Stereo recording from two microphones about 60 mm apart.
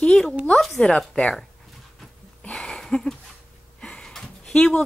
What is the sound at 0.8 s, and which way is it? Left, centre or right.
Speech, centre.